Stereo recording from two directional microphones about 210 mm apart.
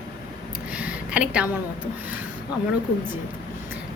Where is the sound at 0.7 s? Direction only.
5° right (ahead or behind).